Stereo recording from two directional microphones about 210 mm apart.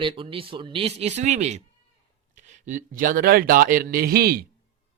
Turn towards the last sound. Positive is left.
turn(degrees=-45)  # may be behind; listen again after turning